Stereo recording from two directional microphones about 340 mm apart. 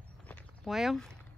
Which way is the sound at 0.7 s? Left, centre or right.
Centre.